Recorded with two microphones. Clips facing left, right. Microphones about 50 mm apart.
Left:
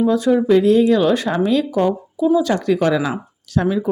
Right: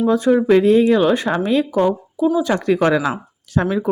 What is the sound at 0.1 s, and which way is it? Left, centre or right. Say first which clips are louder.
Speech: right 4 dB; right.